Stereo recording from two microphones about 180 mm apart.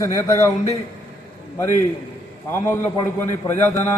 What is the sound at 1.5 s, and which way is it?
A man's voice, 15° left (ahead or behind).